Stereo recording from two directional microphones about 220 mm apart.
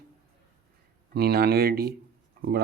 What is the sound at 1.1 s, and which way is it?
Speech, 45° right (ahead or behind).